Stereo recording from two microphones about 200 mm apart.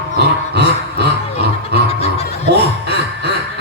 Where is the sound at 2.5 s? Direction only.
55° right (ahead or behind).